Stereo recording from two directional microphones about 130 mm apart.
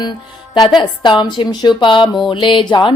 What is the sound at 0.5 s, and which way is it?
Music, 35° left (ahead or behind).